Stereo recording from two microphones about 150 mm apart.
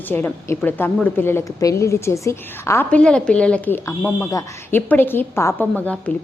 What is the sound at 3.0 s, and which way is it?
Speech, 5° left (ahead or behind).